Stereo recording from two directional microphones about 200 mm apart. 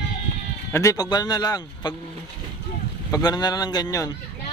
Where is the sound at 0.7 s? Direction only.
15° left (ahead or behind).